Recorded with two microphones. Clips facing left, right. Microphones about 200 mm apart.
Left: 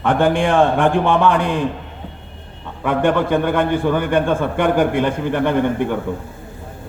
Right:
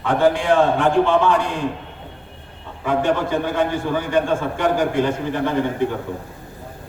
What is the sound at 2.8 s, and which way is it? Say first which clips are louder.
A man's voice: left 3 dB; 55° left (ahead or behind).